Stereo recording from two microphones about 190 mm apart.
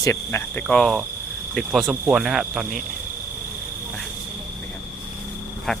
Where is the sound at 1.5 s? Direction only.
Centre (ahead or behind).